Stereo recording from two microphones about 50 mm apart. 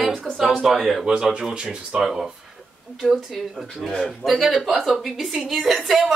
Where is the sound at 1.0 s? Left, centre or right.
Centre.